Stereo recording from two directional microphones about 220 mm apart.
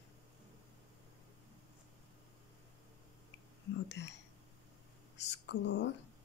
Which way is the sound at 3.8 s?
55° left (ahead or behind).